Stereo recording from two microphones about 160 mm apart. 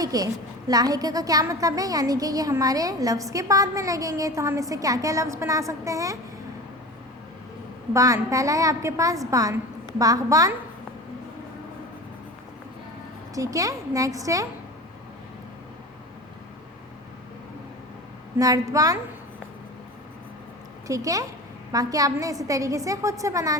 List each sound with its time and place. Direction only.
0.0 s a woman's voice: 25° right (ahead or behind)
7.9 s a woman's voice: 20° right (ahead or behind)
13.3 s a woman's voice: 20° right (ahead or behind)
18.3 s a woman's voice: 20° right (ahead or behind)
20.8 s a woman's voice: 20° right (ahead or behind)